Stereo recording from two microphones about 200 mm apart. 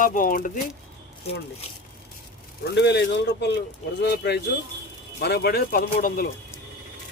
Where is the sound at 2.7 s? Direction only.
60° left (ahead or behind).